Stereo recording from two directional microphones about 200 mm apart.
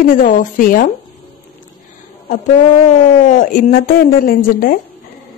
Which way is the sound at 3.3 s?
45° left (ahead or behind).